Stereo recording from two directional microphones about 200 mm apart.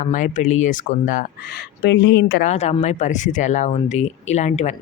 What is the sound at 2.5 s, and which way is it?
Speech, 35° left (ahead or behind).